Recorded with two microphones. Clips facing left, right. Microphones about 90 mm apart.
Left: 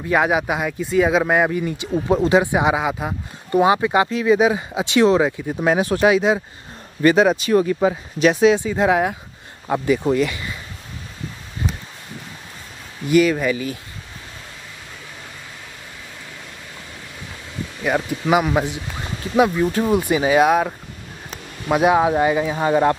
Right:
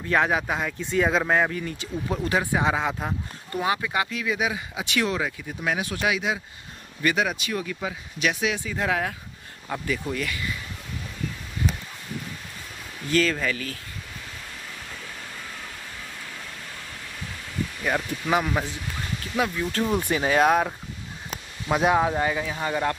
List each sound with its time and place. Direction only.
0.0 s speech: 10° left (ahead or behind)
3.5 s speech: 20° left (ahead or behind)
13.1 s speech: 15° left (ahead or behind)
17.8 s speech: 15° left (ahead or behind)
19.7 s speech: 10° left (ahead or behind)
22.1 s speech: 20° left (ahead or behind)